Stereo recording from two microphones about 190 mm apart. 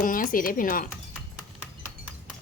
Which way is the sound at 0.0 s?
45° left (ahead or behind).